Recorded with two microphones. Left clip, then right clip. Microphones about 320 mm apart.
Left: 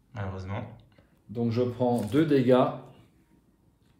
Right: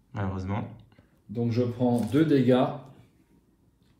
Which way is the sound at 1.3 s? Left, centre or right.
Left.